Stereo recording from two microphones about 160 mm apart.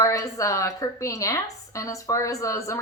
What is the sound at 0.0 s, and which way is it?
A woman's voice, 20° left (ahead or behind).